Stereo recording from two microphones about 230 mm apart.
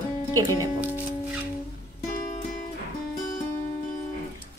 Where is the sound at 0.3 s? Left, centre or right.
Centre.